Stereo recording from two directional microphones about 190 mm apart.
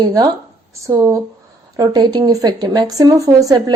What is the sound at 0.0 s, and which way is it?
Speech, 20° right (ahead or behind).